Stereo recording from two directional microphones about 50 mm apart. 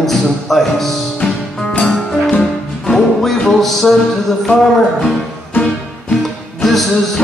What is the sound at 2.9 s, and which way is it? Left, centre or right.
Music, centre.